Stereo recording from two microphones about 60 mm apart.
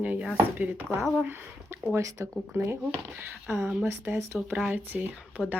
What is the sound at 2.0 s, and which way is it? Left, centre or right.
Speech, right.